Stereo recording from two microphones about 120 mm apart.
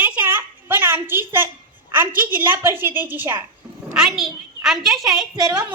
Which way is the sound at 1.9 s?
15° right (ahead or behind).